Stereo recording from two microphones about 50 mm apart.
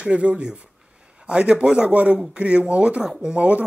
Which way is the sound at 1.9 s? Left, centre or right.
Right.